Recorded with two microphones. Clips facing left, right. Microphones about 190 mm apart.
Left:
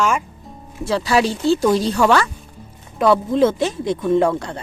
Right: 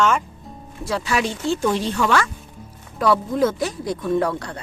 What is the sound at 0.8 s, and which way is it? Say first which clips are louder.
Speech: left 5 dB; 30° left (ahead or behind).